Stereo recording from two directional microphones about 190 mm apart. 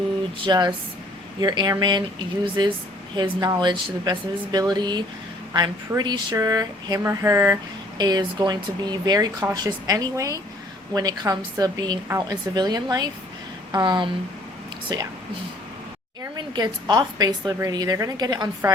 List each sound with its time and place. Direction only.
0.4 s speech: 25° right (ahead or behind)
16.2 s a woman's voice: 20° right (ahead or behind)